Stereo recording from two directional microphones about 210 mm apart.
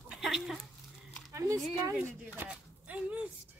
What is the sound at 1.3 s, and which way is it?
Speech, 15° right (ahead or behind).